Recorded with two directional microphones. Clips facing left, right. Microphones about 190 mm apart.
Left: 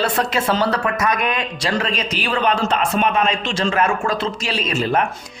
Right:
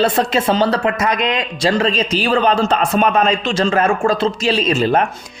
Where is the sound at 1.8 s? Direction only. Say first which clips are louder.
Right 6 dB; 30° right (ahead or behind).